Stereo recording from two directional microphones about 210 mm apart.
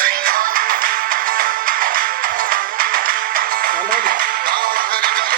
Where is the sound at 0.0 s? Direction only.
45° right (ahead or behind).